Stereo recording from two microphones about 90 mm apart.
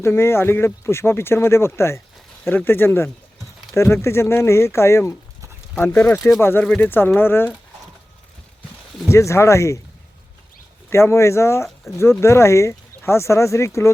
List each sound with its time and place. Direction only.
0.0 s speech: 30° left (ahead or behind)
9.0 s speech: 35° left (ahead or behind)
10.8 s speech: 30° left (ahead or behind)